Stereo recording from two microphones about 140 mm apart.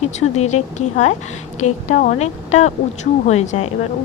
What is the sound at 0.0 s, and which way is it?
A woman's voice, 50° left (ahead or behind).